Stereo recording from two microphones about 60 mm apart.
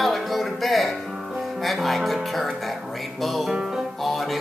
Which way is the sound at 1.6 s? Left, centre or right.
Centre.